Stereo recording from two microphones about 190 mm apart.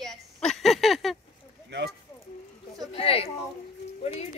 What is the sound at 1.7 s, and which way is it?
Speech, 65° right (ahead or behind).